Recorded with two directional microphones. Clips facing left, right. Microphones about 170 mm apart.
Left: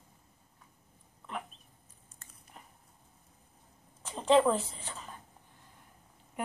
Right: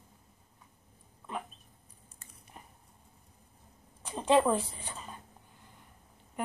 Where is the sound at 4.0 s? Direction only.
10° right (ahead or behind).